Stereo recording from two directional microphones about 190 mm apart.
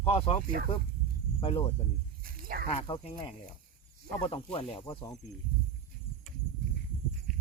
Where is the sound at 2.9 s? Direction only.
30° left (ahead or behind).